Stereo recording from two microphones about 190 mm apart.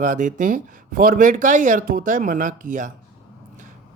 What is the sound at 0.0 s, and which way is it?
Speech, 40° right (ahead or behind).